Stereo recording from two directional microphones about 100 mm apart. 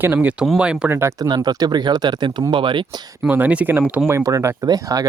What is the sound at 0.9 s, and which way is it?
Speech, 25° right (ahead or behind).